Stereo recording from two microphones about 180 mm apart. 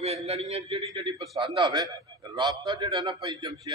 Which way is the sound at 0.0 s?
35° right (ahead or behind).